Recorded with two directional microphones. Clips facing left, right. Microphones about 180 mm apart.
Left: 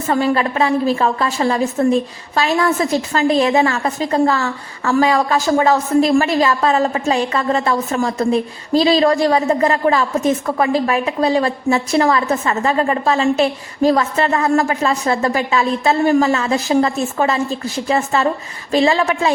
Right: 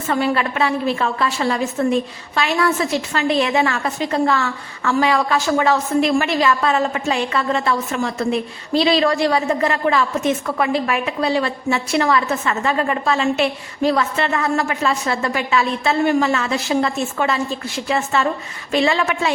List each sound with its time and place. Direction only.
0.1 s a woman's voice: 35° left (ahead or behind)